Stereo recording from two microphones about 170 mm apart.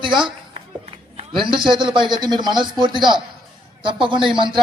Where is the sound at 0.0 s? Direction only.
30° right (ahead or behind).